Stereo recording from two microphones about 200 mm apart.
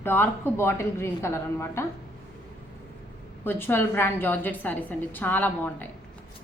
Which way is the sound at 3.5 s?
10° left (ahead or behind).